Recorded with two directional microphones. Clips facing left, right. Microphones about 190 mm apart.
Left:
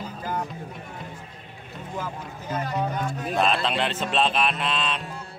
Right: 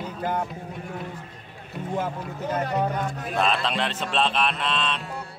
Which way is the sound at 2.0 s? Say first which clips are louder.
Right 5 dB; 60° right (ahead or behind).